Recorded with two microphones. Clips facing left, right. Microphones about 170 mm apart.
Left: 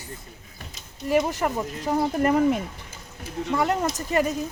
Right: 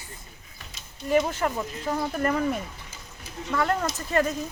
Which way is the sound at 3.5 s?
15° left (ahead or behind).